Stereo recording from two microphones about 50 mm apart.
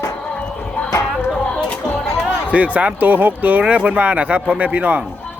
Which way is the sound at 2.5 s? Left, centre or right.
Right.